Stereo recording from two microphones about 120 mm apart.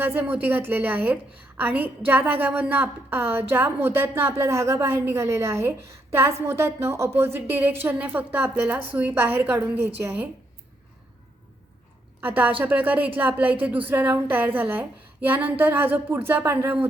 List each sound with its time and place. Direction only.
0.0 s a woman's voice: 15° right (ahead or behind)
12.2 s a woman's voice: 15° right (ahead or behind)